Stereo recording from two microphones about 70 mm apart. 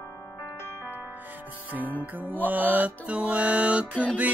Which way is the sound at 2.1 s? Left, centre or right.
Right.